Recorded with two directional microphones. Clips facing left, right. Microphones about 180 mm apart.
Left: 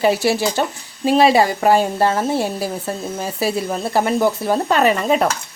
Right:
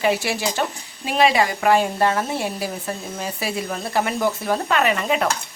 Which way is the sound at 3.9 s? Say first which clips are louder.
Left 5 dB; 30° left (ahead or behind).